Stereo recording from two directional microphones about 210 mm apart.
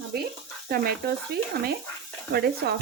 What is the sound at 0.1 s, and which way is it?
Speech, 50° right (ahead or behind).